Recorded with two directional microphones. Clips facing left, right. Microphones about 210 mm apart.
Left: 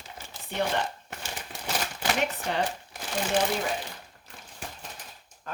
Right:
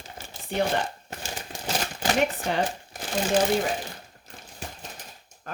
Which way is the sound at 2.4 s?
45° right (ahead or behind).